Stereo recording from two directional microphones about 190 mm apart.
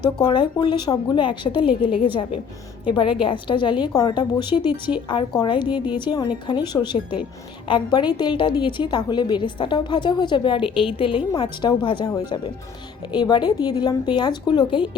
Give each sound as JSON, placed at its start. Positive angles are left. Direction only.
{"t": 0.0, "sound": "a woman's voice", "side_deg": 25}